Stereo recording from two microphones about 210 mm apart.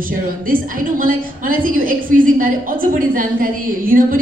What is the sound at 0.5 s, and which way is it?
A woman's voice, 40° right (ahead or behind).